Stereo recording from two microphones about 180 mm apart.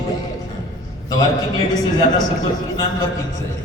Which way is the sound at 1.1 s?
20° left (ahead or behind).